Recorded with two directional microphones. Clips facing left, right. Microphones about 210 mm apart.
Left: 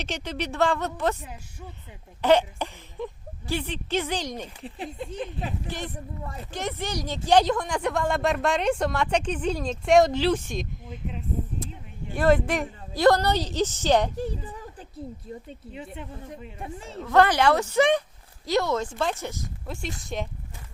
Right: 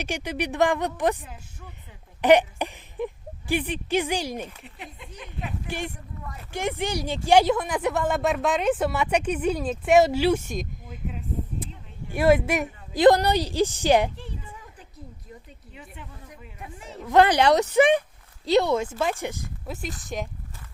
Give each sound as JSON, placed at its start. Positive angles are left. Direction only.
{"t": 0.0, "sound": "speech", "side_deg": -10}
{"t": 2.2, "sound": "speech", "side_deg": -15}
{"t": 4.6, "sound": "speech", "side_deg": 30}
{"t": 5.6, "sound": "speech", "side_deg": -15}
{"t": 14.2, "sound": "a sound", "side_deg": 40}
{"t": 15.4, "sound": "a woman's voice", "side_deg": 20}
{"t": 17.1, "sound": "speech", "side_deg": -15}